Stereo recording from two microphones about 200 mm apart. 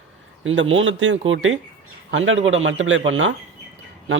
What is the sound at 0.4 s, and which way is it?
Speech, 75° right (ahead or behind).